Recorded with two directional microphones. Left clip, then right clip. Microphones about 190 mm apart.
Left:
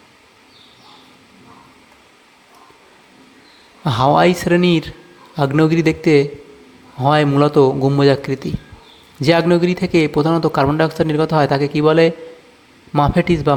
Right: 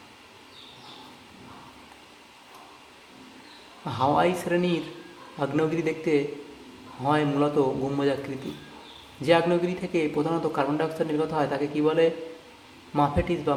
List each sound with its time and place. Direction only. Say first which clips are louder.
3.8 s a man's voice: left 10 dB; 50° left (ahead or behind)